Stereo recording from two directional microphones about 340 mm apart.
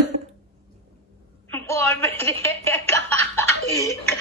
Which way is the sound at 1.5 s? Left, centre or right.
Centre.